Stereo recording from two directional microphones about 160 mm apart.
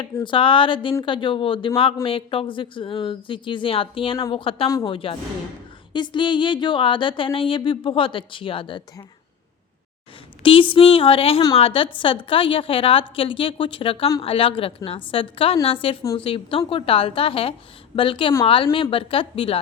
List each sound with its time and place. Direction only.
0.0 s speech: 30° left (ahead or behind)
10.4 s speech: 35° left (ahead or behind)